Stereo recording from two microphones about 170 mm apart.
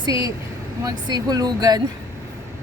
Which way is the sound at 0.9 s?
25° right (ahead or behind).